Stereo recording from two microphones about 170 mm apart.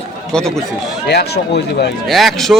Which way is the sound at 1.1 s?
75° left (ahead or behind).